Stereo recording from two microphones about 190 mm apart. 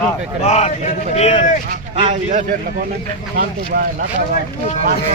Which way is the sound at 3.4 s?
50° right (ahead or behind).